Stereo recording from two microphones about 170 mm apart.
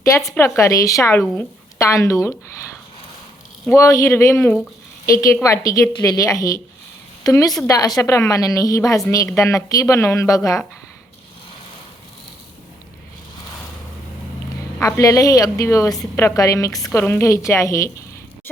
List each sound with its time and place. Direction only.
0.3 s a woman's voice: 15° left (ahead or behind)
3.8 s a woman's voice: 20° left (ahead or behind)
14.8 s a woman's voice: 15° left (ahead or behind)